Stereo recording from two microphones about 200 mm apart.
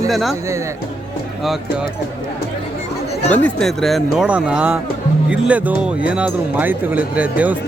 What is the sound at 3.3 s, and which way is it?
Speech, 5° left (ahead or behind).